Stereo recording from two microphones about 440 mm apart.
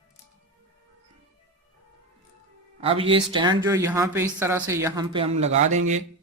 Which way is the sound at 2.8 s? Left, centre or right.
Centre.